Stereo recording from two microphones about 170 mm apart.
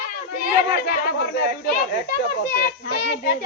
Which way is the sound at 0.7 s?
75° left (ahead or behind).